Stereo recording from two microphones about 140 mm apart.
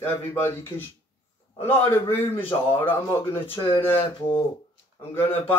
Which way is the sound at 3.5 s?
40° left (ahead or behind).